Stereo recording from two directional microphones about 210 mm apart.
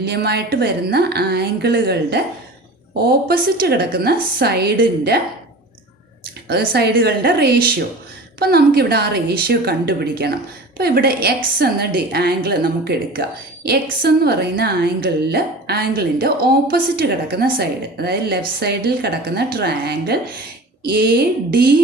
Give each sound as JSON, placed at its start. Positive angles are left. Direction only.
{"t": 0.0, "sound": "a woman's voice", "side_deg": -50}
{"t": 6.5, "sound": "a woman's voice", "side_deg": -45}